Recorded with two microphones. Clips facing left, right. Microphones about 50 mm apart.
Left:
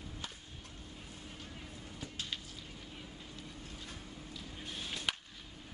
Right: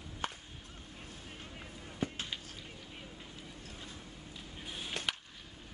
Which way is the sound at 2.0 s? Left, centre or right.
Right.